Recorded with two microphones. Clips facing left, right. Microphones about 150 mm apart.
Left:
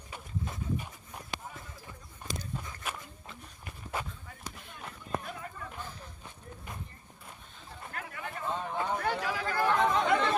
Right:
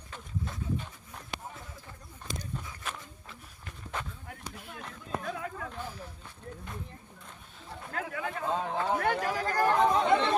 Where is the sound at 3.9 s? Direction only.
5° left (ahead or behind).